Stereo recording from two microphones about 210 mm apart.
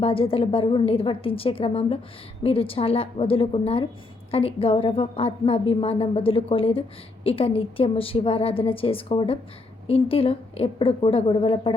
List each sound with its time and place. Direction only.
0.0 s a woman's voice: 25° left (ahead or behind)